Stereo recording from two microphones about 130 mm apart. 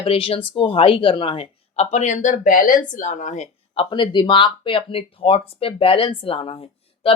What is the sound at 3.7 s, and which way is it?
Speech, 40° left (ahead or behind).